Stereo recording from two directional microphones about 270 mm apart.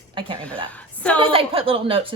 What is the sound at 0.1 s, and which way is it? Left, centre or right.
Speech, centre.